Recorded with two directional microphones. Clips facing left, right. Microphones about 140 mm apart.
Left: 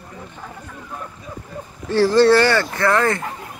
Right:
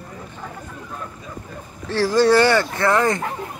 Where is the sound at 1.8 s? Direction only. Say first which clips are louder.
Left 3 dB; 5° right (ahead or behind).